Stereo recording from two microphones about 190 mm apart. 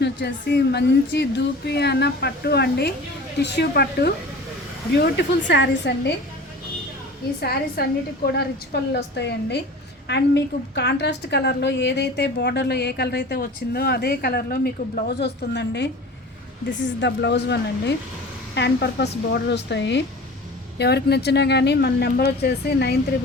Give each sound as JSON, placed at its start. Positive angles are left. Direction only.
{"t": 0.0, "sound": "a woman's voice", "side_deg": 65}
{"t": 7.4, "sound": "a woman's voice", "side_deg": 55}
{"t": 17.0, "sound": "a woman's voice", "side_deg": 65}